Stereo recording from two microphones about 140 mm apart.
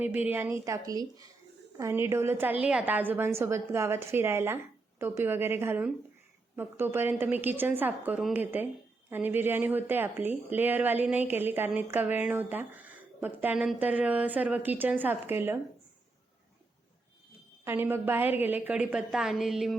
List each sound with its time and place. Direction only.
0.3 s speech: 15° right (ahead or behind)
17.7 s speech: 15° right (ahead or behind)